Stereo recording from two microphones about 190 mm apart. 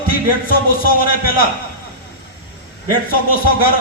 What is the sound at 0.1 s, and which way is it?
A man's voice, 50° left (ahead or behind).